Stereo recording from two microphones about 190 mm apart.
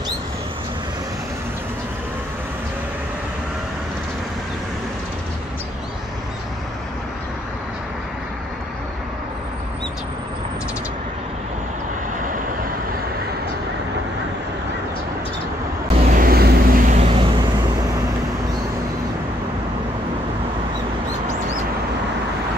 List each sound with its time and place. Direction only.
16.0 s vehicle: 50° right (ahead or behind); by 17.5 s 25° right (ahead or behind)